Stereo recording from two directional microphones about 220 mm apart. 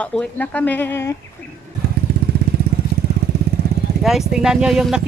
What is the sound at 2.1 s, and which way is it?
Vehicle, 45° right (ahead or behind).